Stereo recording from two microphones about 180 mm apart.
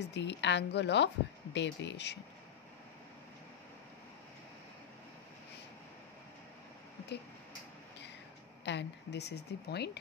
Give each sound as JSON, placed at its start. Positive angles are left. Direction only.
{"t": 0.1, "sound": "a woman's voice", "side_deg": 75}
{"t": 8.6, "sound": "a woman's voice", "side_deg": 70}